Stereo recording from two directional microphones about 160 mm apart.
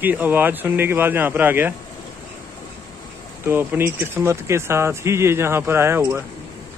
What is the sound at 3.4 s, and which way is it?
Speech, 15° right (ahead or behind).